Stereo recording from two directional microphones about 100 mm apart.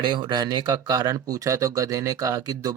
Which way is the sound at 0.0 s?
50° right (ahead or behind).